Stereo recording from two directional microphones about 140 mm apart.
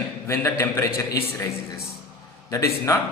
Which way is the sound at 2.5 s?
20° left (ahead or behind).